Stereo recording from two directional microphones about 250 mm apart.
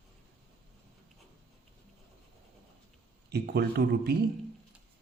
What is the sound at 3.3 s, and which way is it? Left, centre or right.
Speech, right.